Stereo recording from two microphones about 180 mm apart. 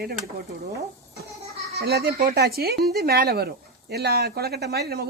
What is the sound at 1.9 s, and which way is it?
Speech, 60° right (ahead or behind).